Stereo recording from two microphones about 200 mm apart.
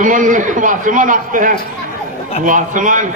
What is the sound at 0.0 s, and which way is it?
A man's voice, 40° right (ahead or behind).